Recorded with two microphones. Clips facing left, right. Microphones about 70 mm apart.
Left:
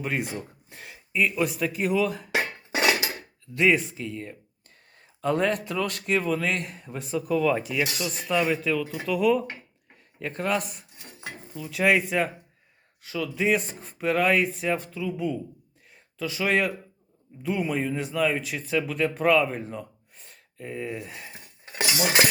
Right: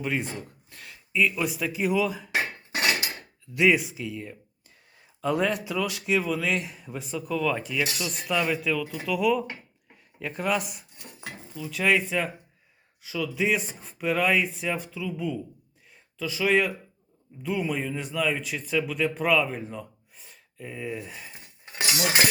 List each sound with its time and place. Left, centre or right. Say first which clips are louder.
0.0 s speech: even; centre
0.7 s speech: left 2 dB; left
1.1 s speech: even; centre
3.5 s speech: even; centre
11.8 s speech: left 2 dB; centre
21.8 s cutlery: left 1 dB; left